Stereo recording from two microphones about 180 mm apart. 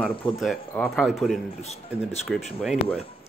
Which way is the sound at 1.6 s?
35° left (ahead or behind).